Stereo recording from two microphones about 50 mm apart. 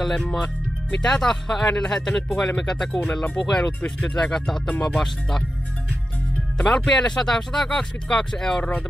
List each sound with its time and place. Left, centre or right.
0.0 s speech: centre
4.8 s speech: centre
6.6 s speech: centre